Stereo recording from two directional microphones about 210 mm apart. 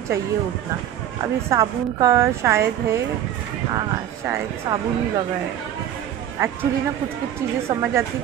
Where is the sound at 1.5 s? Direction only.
15° right (ahead or behind).